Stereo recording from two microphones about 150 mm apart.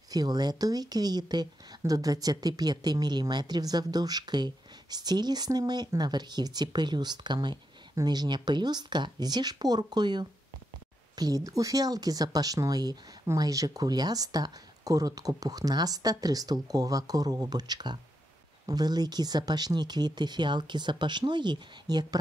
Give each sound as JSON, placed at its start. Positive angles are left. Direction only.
{"t": 0.1, "sound": "speech", "side_deg": -25}